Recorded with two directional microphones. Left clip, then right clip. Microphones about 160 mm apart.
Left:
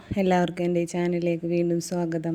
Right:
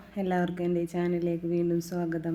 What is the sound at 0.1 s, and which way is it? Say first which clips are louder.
Speech: left 7 dB; 55° left (ahead or behind).